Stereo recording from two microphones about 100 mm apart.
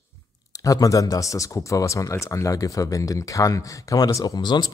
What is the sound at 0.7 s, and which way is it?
Speech, 35° left (ahead or behind).